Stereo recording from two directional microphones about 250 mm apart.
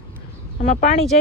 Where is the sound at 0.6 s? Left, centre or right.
Left.